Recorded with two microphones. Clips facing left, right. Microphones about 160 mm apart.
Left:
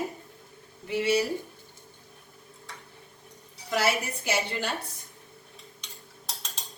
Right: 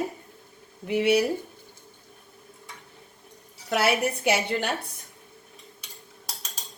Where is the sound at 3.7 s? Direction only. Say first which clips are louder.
Right 3 dB; 60° right (ahead or behind).